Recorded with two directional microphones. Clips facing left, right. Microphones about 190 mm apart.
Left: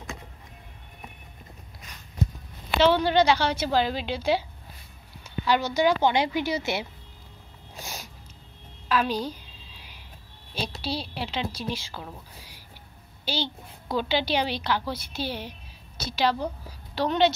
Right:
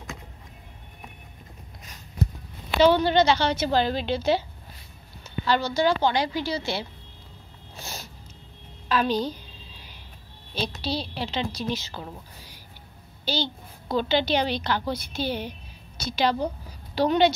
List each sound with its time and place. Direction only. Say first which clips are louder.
3.0 s a woman's voice: right 1 dB; 10° left (ahead or behind)
7.7 s a sound: even; 15° left (ahead or behind)
8.8 s a woman's voice: right 2 dB; 5° left (ahead or behind)
9.8 s vehicle: right 2 dB; 5° left (ahead or behind)
10.5 s a woman's voice: right 2 dB; 5° left (ahead or behind)